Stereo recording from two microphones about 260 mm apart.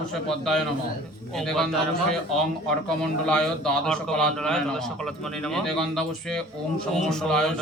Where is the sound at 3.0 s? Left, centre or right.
Centre.